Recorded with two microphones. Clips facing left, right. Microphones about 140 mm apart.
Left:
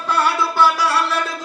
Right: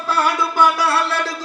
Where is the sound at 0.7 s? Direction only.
60° right (ahead or behind).